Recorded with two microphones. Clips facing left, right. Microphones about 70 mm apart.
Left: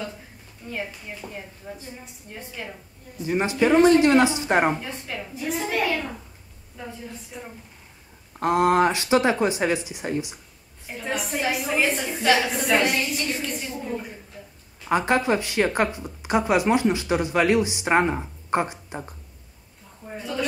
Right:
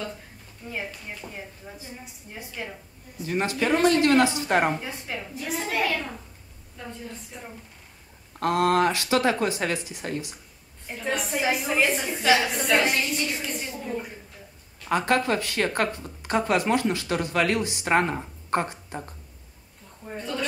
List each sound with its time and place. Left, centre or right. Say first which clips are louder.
0.7 s a woman's voice: left 2 dB; centre
3.3 s speech: left 4 dB; centre
4.8 s a woman's voice: left 1 dB; centre
8.3 s speech: left 2 dB; centre
10.9 s a woman's voice: even; centre
14.8 s speech: left 2 dB; centre
20.1 s a woman's voice: left 2 dB; centre